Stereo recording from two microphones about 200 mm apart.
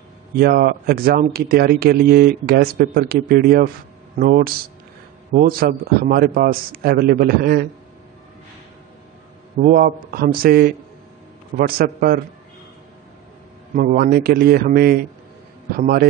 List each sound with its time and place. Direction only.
0.4 s speech: 50° right (ahead or behind)
9.6 s speech: 45° right (ahead or behind)
13.7 s speech: 45° right (ahead or behind)